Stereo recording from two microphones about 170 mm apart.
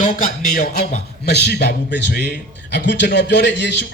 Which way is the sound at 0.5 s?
55° left (ahead or behind).